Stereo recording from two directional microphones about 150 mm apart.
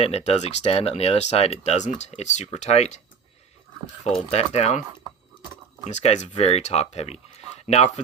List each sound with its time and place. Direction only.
0.0 s speech: 45° left (ahead or behind)
4.0 s speech: 45° left (ahead or behind)
5.9 s speech: 50° left (ahead or behind)